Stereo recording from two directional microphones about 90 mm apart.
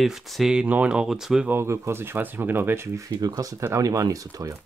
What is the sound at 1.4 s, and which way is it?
Speech, 25° right (ahead or behind).